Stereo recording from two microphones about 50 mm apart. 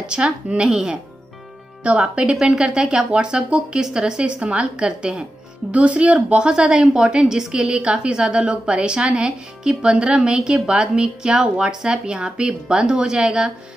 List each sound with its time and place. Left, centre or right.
0.0 s a woman's voice: centre